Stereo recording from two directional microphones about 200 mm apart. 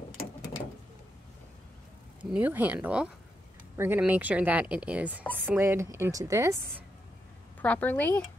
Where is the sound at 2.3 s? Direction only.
10° right (ahead or behind).